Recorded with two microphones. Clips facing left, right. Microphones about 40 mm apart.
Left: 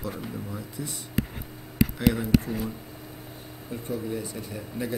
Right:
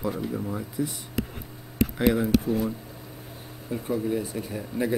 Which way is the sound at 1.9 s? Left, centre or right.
Centre.